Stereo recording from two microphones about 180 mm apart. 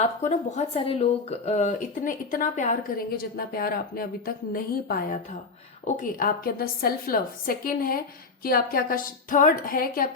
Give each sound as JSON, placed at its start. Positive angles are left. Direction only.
{"t": 0.0, "sound": "speech", "side_deg": 40}